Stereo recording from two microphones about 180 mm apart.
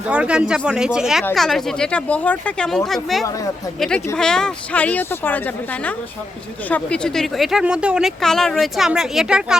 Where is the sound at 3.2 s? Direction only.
20° left (ahead or behind).